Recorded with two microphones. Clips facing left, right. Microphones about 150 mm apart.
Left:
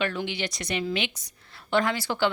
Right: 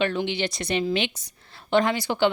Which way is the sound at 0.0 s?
25° right (ahead or behind).